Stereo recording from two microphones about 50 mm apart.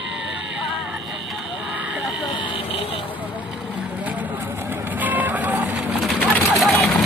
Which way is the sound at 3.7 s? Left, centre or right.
Right.